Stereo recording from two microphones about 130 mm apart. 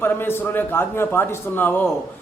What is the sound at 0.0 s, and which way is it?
A man's voice, 15° left (ahead or behind).